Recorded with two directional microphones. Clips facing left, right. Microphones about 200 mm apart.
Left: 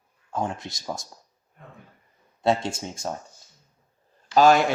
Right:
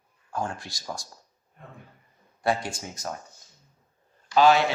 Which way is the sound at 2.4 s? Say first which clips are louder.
Left 4 dB; 25° left (ahead or behind).